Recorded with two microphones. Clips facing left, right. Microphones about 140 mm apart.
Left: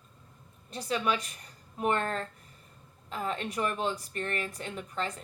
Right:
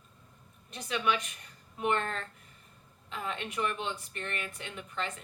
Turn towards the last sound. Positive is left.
turn(degrees=40)  # may be behind; listen again after turning